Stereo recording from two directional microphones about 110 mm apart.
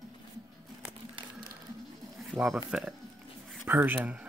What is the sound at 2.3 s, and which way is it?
Speech, 40° right (ahead or behind).